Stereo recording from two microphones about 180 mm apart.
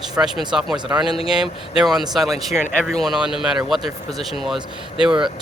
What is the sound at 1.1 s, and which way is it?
Speech, 30° left (ahead or behind).